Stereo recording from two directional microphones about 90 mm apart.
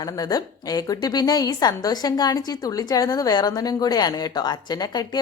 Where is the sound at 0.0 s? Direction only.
45° left (ahead or behind).